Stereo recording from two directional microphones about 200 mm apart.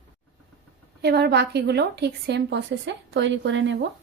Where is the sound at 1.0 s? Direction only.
55° right (ahead or behind).